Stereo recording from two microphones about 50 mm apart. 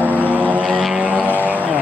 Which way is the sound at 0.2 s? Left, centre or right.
Right.